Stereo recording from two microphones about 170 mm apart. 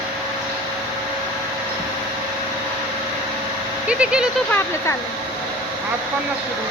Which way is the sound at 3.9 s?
5° right (ahead or behind).